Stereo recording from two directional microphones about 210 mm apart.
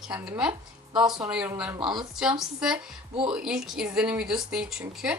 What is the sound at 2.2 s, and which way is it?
A woman's voice, 5° right (ahead or behind).